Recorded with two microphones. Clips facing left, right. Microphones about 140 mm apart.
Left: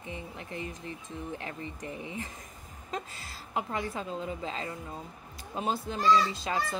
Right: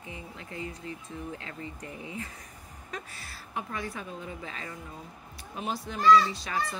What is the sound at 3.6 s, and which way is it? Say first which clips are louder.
Speech: left 3 dB; 25° left (ahead or behind).